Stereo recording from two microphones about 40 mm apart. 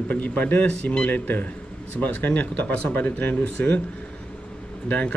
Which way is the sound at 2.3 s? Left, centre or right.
Left.